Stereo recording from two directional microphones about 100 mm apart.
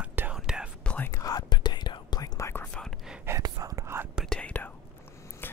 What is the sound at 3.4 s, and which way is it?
Whispering, 35° right (ahead or behind).